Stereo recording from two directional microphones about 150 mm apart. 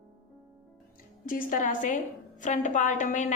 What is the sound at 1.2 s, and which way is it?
A woman's voice, 65° left (ahead or behind).